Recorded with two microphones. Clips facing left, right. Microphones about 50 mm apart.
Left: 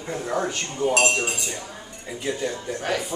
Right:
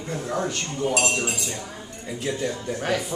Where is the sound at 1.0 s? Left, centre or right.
Left.